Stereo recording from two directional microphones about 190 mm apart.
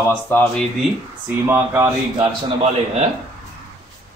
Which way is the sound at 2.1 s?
30° right (ahead or behind).